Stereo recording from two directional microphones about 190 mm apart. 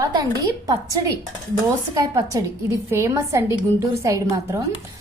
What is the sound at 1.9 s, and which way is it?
A woman's voice, 15° right (ahead or behind).